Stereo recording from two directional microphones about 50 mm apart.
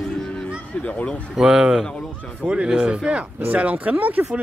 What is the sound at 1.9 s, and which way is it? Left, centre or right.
Speech, left.